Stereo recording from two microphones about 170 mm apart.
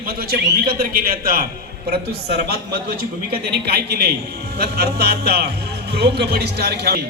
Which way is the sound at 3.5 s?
70° right (ahead or behind).